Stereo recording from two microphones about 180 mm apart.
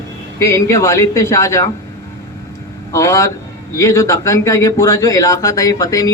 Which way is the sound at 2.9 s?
15° left (ahead or behind).